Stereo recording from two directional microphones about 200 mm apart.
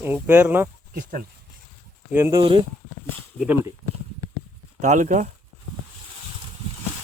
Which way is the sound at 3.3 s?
10° right (ahead or behind).